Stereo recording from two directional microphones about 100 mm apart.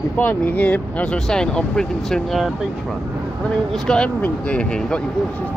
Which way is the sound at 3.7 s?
5° left (ahead or behind).